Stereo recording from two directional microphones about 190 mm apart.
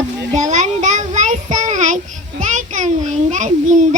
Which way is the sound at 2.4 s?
40° right (ahead or behind).